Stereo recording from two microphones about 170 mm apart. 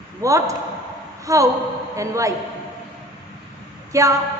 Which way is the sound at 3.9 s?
20° right (ahead or behind).